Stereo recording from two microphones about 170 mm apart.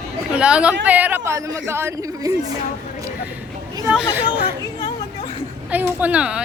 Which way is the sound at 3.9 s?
10° right (ahead or behind).